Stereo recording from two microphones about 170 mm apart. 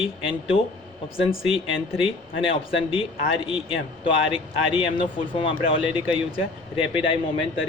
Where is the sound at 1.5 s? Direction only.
35° left (ahead or behind).